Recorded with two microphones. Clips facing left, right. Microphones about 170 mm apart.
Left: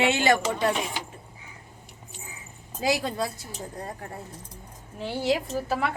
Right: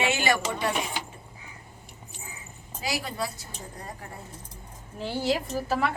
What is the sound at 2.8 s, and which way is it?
Speech, 55° left (ahead or behind).